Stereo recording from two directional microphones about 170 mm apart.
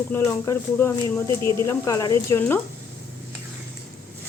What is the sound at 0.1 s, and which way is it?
A woman's voice, 15° left (ahead or behind).